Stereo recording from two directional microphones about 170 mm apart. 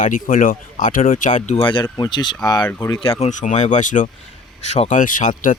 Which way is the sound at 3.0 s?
40° left (ahead or behind).